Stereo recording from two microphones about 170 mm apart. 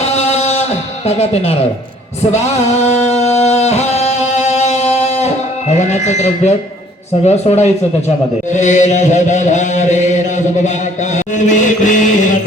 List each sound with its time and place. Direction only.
0.2 s music: 40° left (ahead or behind)
7.3 s speech: 40° left (ahead or behind)
8.5 s mantra: 45° left (ahead or behind)